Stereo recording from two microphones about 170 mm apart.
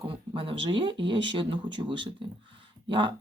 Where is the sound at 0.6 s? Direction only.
30° right (ahead or behind).